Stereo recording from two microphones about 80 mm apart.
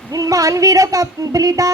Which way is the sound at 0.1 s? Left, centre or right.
Right.